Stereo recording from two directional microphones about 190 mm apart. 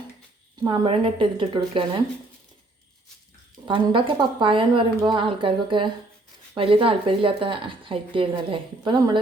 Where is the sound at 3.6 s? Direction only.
25° right (ahead or behind).